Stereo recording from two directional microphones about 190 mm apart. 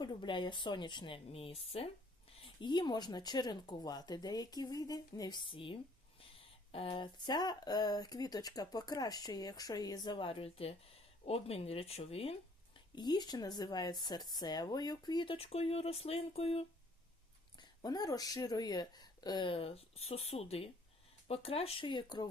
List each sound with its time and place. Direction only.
0.0 s speech: 25° left (ahead or behind)
13.0 s speech: 20° left (ahead or behind)
17.6 s speech: 20° left (ahead or behind)